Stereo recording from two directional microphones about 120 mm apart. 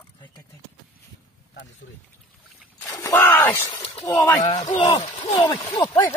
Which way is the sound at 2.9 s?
25° left (ahead or behind).